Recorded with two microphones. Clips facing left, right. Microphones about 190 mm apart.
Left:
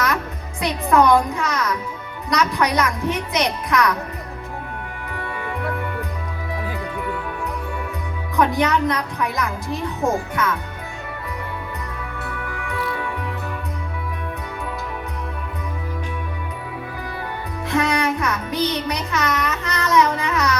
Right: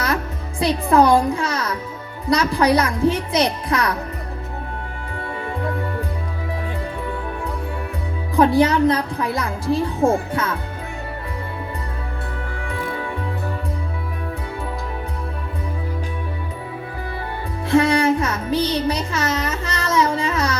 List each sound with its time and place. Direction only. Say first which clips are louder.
0.6 s speech: right 2 dB; 30° right (ahead or behind)
5.1 s music: right 1 dB; 30° right (ahead or behind)
8.4 s speech: right 4 dB; 30° right (ahead or behind)
12.3 s music: left 1 dB; 30° right (ahead or behind)
17.7 s music: right 5 dB; 30° right (ahead or behind)